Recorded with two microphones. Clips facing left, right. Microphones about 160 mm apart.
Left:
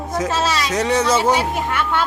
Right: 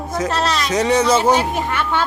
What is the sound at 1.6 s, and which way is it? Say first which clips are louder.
Speech: even; centre (ahead or behind).